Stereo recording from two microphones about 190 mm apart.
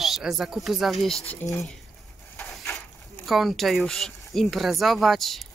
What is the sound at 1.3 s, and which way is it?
Speech, 15° left (ahead or behind).